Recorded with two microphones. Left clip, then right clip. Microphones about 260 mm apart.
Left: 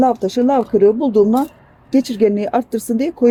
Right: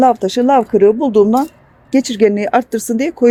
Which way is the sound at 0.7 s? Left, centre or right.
Right.